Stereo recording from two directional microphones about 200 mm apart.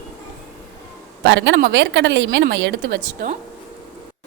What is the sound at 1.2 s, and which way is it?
A woman's voice, 65° right (ahead or behind).